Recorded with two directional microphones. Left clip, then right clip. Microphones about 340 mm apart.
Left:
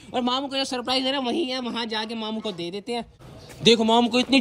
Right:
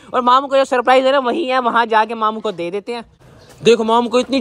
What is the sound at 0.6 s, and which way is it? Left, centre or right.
Speech, centre.